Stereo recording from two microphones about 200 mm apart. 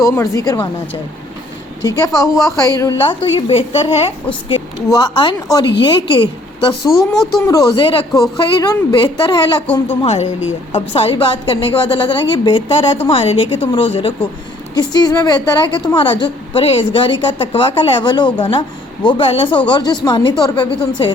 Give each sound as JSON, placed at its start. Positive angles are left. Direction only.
{"t": 0.0, "sound": "a woman's voice", "side_deg": 15}
{"t": 2.0, "sound": "a woman's voice", "side_deg": 15}